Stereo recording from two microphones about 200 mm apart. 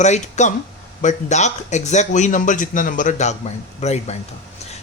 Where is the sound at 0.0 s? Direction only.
35° left (ahead or behind).